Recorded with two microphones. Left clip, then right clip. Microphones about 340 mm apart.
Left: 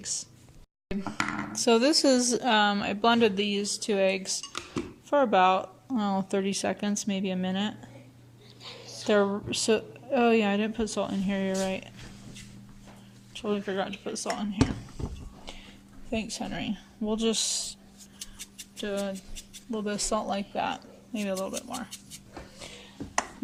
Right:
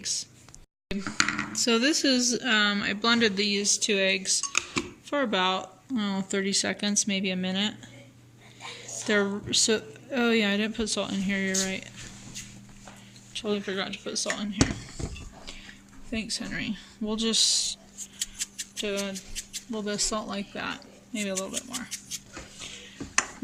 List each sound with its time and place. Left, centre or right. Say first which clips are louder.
0.0 s a woman's voice: right 4 dB; centre
9.0 s a woman's voice: left 1 dB; centre
13.3 s a woman's voice: even; centre
16.0 s speech: even; centre
18.2 s scissors: right 9 dB; centre
19.7 s speech: even; centre